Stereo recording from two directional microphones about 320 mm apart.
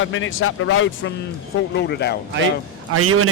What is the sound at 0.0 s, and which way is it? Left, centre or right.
Speech, left.